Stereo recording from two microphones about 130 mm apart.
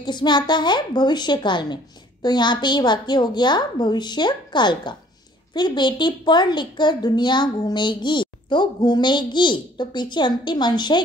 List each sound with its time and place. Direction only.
0.0 s a child's voice: 35° left (ahead or behind)